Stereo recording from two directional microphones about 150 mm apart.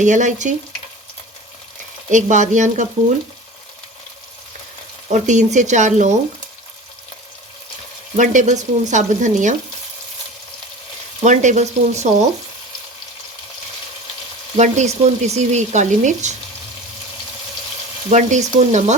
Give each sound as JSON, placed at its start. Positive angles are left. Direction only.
{"t": 0.0, "sound": "speech", "side_deg": -55}
{"t": 2.0, "sound": "speech", "side_deg": -55}
{"t": 5.1, "sound": "speech", "side_deg": -55}
{"t": 8.1, "sound": "speech", "side_deg": -55}
{"t": 11.2, "sound": "speech", "side_deg": -50}
{"t": 14.5, "sound": "speech", "side_deg": -50}
{"t": 18.1, "sound": "speech", "side_deg": -50}